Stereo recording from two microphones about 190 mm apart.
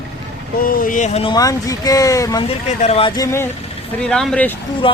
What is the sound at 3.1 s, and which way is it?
Speech, 15° left (ahead or behind).